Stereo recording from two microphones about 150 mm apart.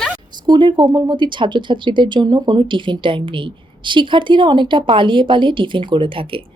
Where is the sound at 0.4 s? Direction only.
30° right (ahead or behind).